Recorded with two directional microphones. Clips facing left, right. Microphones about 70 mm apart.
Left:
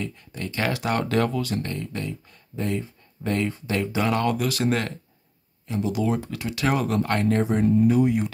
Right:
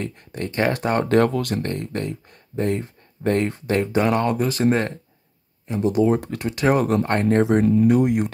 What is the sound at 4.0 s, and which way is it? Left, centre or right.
Speech, right.